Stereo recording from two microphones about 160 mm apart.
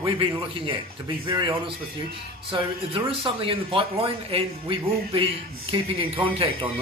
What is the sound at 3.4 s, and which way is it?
A man's voice, 35° right (ahead or behind).